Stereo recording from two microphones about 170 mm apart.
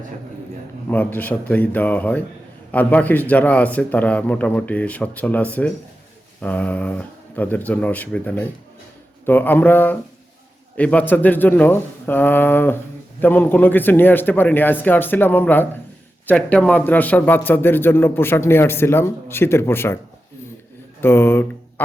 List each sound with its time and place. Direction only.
0.9 s speech: 10° left (ahead or behind)
21.0 s speech: 15° left (ahead or behind)